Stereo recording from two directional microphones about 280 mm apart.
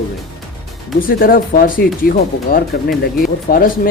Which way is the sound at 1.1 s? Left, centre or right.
Left.